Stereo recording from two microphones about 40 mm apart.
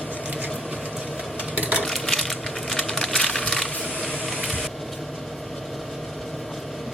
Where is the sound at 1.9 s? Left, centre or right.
Centre.